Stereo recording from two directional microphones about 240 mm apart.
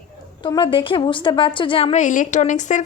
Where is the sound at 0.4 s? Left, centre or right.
Centre.